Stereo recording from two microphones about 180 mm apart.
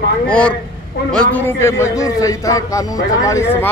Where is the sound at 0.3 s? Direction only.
5° left (ahead or behind).